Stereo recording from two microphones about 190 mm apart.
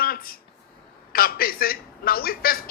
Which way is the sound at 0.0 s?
50° left (ahead or behind).